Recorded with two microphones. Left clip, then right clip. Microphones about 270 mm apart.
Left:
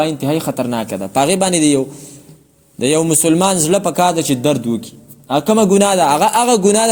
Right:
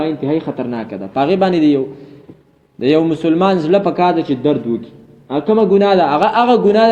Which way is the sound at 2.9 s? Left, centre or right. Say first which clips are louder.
Left 1 dB; left.